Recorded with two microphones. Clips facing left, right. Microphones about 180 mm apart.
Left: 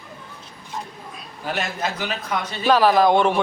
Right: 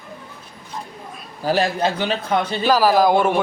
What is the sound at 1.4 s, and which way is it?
A man's voice, 35° right (ahead or behind).